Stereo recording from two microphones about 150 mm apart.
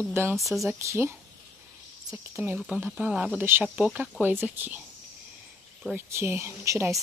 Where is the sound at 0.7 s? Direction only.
15° right (ahead or behind).